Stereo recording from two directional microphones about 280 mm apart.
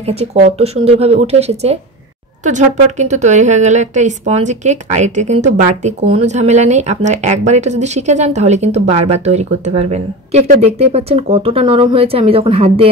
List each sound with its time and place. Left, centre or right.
0.0 s speech: right